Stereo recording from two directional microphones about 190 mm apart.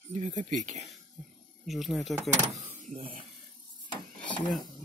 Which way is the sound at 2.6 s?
40° right (ahead or behind).